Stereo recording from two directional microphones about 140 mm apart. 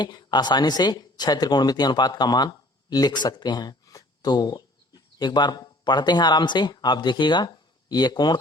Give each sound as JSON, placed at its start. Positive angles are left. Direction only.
{"t": 0.0, "sound": "speech", "side_deg": 30}